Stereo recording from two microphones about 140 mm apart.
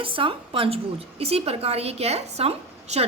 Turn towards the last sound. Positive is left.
turn(degrees=-45)  # may be behind; listen again after turning